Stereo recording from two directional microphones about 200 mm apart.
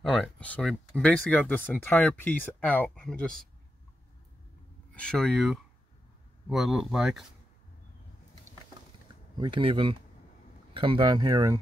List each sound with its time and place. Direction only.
0.0 s speech: 5° left (ahead or behind)
4.9 s speech: 5° left (ahead or behind)
9.4 s speech: 25° right (ahead or behind)